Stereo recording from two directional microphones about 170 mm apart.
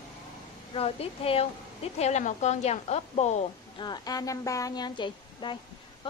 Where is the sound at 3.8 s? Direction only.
25° left (ahead or behind).